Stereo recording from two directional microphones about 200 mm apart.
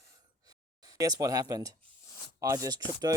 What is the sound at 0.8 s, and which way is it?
Speech, 15° right (ahead or behind).